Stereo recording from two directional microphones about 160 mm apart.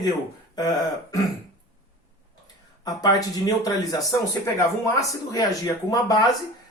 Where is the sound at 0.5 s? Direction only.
25° left (ahead or behind).